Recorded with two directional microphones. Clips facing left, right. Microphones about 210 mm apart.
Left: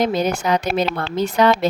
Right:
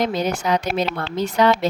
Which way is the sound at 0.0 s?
50° left (ahead or behind).